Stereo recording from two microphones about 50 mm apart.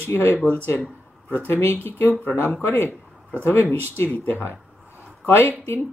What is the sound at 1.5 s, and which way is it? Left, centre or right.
A man's voice, left.